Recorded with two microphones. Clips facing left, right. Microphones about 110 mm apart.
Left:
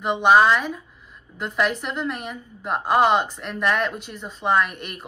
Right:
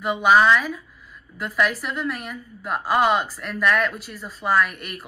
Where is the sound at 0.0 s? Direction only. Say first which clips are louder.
Left 1 dB; 5° right (ahead or behind).